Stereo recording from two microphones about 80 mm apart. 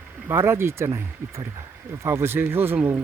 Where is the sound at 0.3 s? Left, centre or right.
Right.